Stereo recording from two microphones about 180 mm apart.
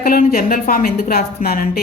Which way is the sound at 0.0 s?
55° left (ahead or behind).